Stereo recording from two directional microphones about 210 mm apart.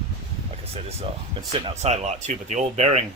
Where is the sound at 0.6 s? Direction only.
30° right (ahead or behind).